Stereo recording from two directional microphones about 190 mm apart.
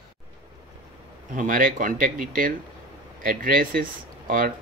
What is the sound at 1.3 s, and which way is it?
Speech, 45° right (ahead or behind).